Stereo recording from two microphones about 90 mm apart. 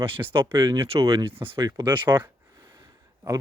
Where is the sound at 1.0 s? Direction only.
85° right.